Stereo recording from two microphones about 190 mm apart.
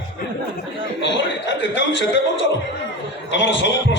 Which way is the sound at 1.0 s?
70° left (ahead or behind).